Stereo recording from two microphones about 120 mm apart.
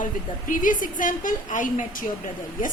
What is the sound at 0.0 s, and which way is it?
A woman's voice, 90° left.